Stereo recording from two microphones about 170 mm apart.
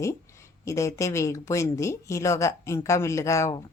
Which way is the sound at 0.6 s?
15° left (ahead or behind).